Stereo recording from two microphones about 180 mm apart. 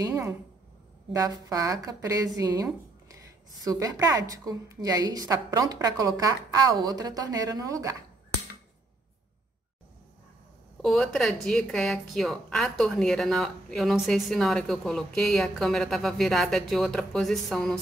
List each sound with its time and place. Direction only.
0.0 s a sound: 15° right (ahead or behind)
1.1 s a woman's voice: 20° right (ahead or behind)
10.8 s a woman's voice: centre (ahead or behind)